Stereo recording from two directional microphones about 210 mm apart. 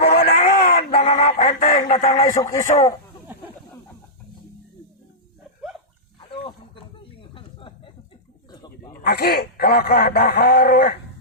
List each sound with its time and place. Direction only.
0.3 s a sound: 40° left (ahead or behind)
0.8 s music: 30° left (ahead or behind)
1.9 s a man's voice: 30° left (ahead or behind)
6.1 s wild animals: 25° left (ahead or behind)
8.6 s goat: 15° left (ahead or behind)
9.0 s speech: 50° left (ahead or behind)